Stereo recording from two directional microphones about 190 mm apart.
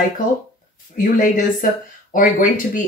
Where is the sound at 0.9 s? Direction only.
45° left (ahead or behind).